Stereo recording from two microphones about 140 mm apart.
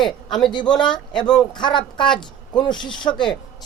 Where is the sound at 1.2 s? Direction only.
30° left (ahead or behind).